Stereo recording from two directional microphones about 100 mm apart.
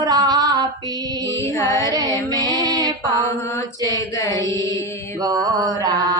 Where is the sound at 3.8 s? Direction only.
35° left (ahead or behind).